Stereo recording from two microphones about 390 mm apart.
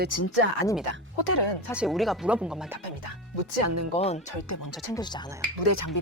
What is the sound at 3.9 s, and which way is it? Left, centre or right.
Speech, centre.